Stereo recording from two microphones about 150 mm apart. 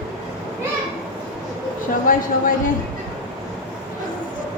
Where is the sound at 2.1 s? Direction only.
65° left (ahead or behind).